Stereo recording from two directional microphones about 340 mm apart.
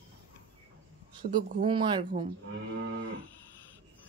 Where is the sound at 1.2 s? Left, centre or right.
Centre.